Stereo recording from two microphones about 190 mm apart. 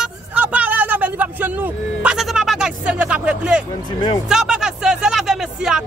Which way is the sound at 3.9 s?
20° left (ahead or behind).